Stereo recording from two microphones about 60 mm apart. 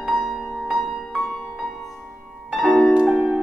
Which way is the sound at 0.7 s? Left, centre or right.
Centre.